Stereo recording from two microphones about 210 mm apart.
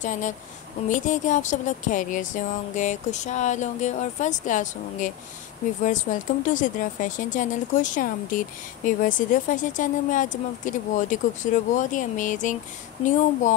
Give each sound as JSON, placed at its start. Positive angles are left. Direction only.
{"t": 0.0, "sound": "speech", "side_deg": 35}